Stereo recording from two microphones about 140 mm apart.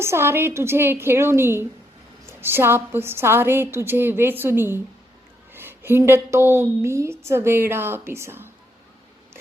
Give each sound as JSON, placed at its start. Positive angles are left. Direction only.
{"t": 0.0, "sound": "a woman's voice", "side_deg": -15}